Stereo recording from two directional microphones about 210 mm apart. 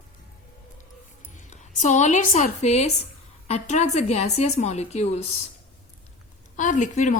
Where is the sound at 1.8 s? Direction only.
35° left (ahead or behind).